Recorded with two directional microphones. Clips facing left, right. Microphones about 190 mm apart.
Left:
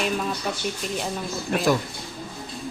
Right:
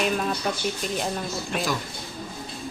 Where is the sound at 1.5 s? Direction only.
55° left (ahead or behind).